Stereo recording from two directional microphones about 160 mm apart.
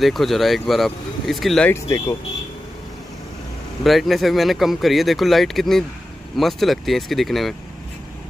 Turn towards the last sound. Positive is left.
turn(degrees=0)  # may be behind; listen again after turning